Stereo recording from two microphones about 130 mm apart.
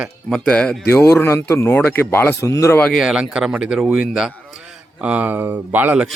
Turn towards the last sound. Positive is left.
turn(degrees=-15)  # may be behind; listen again after turning